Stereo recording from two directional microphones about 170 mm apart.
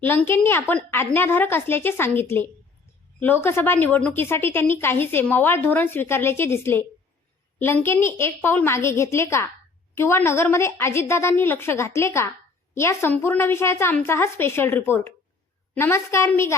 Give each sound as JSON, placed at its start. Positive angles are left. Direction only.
{"t": 0.0, "sound": "a woman's voice", "side_deg": 10}